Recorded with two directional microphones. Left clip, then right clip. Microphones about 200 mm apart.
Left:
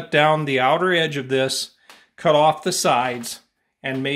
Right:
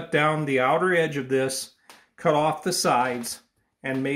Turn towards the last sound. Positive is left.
turn(degrees=45)  # may be behind; listen again after turning